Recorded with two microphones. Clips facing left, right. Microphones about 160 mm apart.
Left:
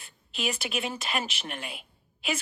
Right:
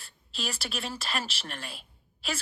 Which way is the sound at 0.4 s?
20° left (ahead or behind).